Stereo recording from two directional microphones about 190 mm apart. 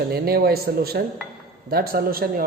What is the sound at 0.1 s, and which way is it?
A woman's voice, 55° right (ahead or behind).